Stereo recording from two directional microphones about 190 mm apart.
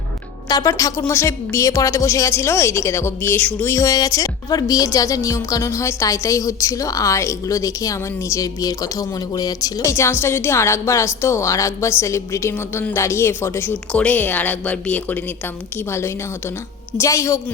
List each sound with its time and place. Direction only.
0.4 s a woman's voice: 20° left (ahead or behind)